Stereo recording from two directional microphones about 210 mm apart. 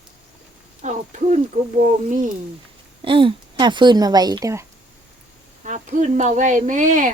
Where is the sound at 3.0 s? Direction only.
25° right (ahead or behind).